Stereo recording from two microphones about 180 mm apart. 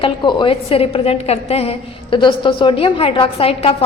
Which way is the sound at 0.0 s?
25° left (ahead or behind).